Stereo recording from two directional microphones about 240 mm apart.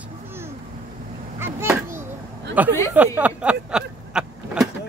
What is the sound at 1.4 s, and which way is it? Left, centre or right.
Children playing, centre.